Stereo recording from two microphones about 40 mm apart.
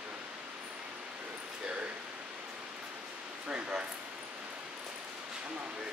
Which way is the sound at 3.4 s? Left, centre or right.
Right.